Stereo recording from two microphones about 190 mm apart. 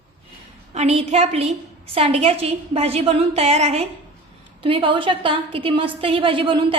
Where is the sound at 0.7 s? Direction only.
35° right (ahead or behind).